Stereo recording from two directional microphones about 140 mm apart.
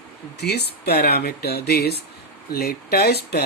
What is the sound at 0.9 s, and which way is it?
Speech, 90° left.